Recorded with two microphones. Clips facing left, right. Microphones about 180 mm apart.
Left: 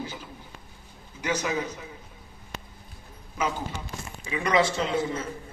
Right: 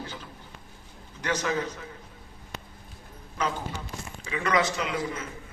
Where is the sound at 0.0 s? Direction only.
10° left (ahead or behind).